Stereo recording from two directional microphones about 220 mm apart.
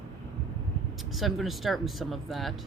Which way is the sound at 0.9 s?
Centre (ahead or behind).